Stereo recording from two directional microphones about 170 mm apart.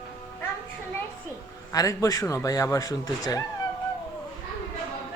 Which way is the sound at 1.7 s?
20° left (ahead or behind).